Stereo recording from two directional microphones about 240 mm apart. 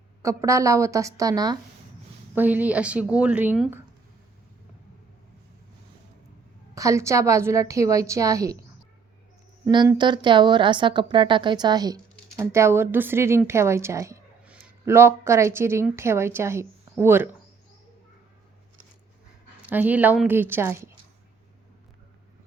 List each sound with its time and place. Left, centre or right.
0.2 s a woman's voice: centre
6.7 s a woman's voice: centre
9.6 s a woman's voice: centre
19.7 s a woman's voice: centre